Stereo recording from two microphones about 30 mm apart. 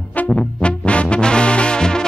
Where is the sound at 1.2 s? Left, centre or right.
Left.